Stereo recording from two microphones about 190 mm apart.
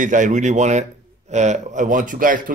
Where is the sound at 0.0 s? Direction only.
40° right (ahead or behind).